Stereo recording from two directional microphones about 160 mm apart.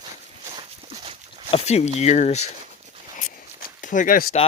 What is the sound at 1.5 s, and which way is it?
Speech, 40° left (ahead or behind).